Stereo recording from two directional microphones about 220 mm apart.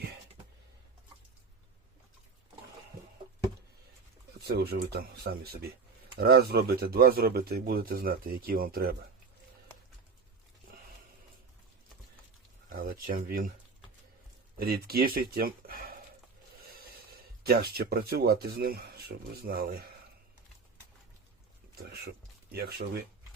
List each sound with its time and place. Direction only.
4.4 s speech: 45° right (ahead or behind)
12.7 s a sound: 40° right (ahead or behind)
14.6 s speech: 45° right (ahead or behind)
17.4 s speech: 45° right (ahead or behind)
21.8 s speech: 45° right (ahead or behind)